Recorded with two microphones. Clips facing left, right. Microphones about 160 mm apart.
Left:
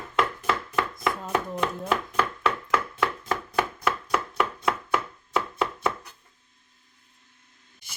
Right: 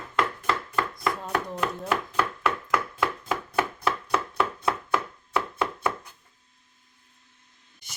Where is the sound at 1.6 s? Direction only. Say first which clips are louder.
Left 1 dB; 5° right (ahead or behind).